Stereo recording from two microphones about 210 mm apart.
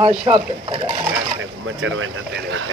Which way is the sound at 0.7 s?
20° right (ahead or behind).